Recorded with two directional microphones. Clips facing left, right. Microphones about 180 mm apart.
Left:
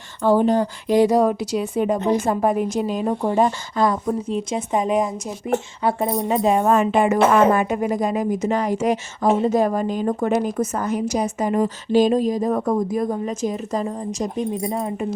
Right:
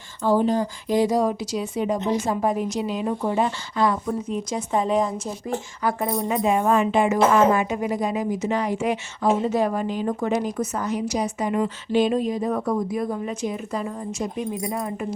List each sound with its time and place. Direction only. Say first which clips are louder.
0.2 s speech: left 3 dB; 65° left (ahead or behind); by 4.1 s 40° left (ahead or behind)
4.3 s speech: left 3 dB; 20° left (ahead or behind); by 9.0 s 45° left (ahead or behind)
9.2 s a woman's voice: left 3 dB; 55° left (ahead or behind); by 14.9 s 30° left (ahead or behind)